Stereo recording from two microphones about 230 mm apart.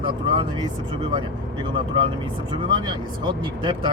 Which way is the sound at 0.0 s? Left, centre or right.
Right.